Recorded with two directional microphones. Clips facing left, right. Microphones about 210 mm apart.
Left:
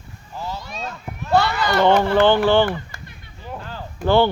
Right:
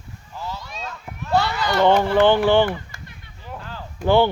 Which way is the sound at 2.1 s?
15° right (ahead or behind).